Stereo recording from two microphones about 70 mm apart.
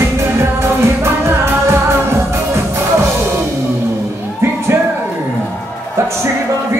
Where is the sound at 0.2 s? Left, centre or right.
Right.